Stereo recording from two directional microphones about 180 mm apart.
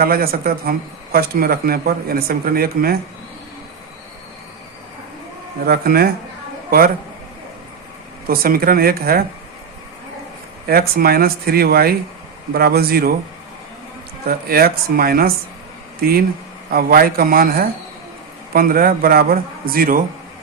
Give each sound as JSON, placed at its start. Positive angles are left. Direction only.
{"t": 0.0, "sound": "speech", "side_deg": -55}
{"t": 5.6, "sound": "a man's voice", "side_deg": -60}
{"t": 8.3, "sound": "speech", "side_deg": -55}
{"t": 10.7, "sound": "speech", "side_deg": -55}
{"t": 14.3, "sound": "speech", "side_deg": -55}
{"t": 16.7, "sound": "speech", "side_deg": -55}